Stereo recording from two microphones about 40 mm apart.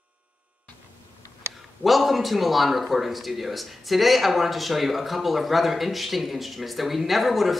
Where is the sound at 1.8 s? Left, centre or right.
Centre.